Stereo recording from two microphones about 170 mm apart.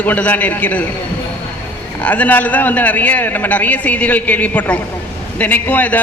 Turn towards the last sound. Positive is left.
turn(degrees=10)  # may be behind; listen again after turning